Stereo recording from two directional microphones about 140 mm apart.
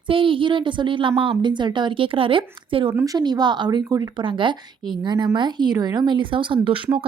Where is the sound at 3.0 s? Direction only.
25° right (ahead or behind).